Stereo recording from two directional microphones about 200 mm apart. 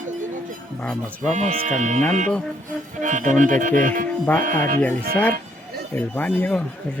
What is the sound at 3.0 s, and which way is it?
Speech, 40° right (ahead or behind).